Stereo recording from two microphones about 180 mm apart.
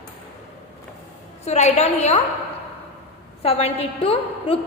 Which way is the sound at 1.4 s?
40° left (ahead or behind).